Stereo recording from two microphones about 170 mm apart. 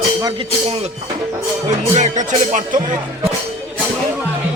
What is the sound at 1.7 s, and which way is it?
Speech, 45° right (ahead or behind).